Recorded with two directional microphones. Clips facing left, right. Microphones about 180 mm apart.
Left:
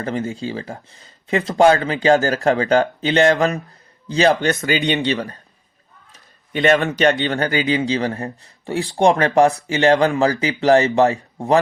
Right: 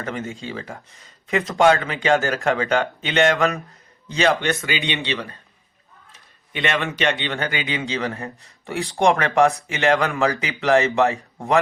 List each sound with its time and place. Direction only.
0.0 s speech: 35° left (ahead or behind)
6.5 s speech: 40° left (ahead or behind)